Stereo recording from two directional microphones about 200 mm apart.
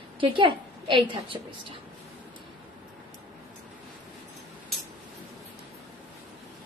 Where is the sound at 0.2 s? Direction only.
25° right (ahead or behind).